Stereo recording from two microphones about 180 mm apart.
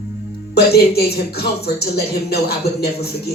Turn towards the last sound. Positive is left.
turn(degrees=60)  # may be behind; listen again after turning